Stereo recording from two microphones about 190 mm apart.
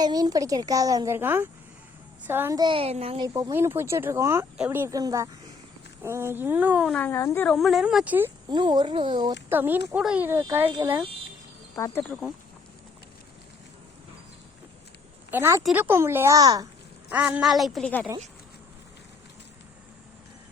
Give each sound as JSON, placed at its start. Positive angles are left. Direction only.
{"t": 0.0, "sound": "a child's voice", "side_deg": -20}
{"t": 3.2, "sound": "speech", "side_deg": -15}
{"t": 6.9, "sound": "speech", "side_deg": 10}
{"t": 8.4, "sound": "a child's voice", "side_deg": -25}
{"t": 9.5, "sound": "speech", "side_deg": -10}
{"t": 11.8, "sound": "speech", "side_deg": 10}
{"t": 15.3, "sound": "speech", "side_deg": -15}
{"t": 17.1, "sound": "speech", "side_deg": -5}